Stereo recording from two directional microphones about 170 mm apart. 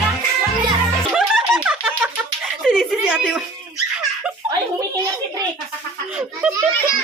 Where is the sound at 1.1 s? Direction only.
5° right (ahead or behind).